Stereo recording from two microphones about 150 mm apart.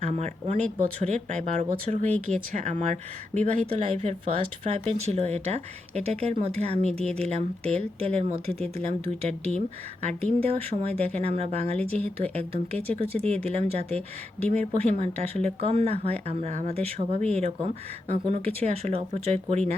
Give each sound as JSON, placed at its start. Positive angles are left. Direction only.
{"t": 0.1, "sound": "speech", "side_deg": -45}